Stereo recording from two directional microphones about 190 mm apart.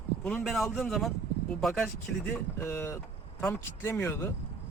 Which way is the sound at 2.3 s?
15° left (ahead or behind).